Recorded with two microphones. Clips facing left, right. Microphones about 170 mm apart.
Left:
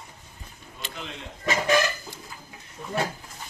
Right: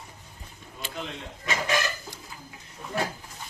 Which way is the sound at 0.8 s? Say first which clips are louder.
Right 1 dB; 5° right (ahead or behind).